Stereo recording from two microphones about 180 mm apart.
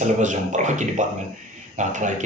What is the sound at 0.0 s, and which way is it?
A man's voice, 45° right (ahead or behind).